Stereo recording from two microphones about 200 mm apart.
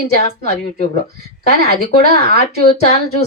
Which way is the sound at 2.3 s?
35° left (ahead or behind).